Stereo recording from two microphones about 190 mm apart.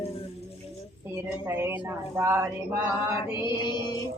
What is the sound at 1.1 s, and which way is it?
A woman's voice, 10° right (ahead or behind).